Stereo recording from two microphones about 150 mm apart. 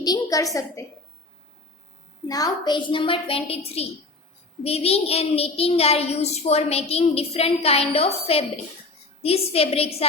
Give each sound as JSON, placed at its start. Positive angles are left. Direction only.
{"t": 0.0, "sound": "a woman's voice", "side_deg": 25}
{"t": 2.2, "sound": "a woman's voice", "side_deg": 25}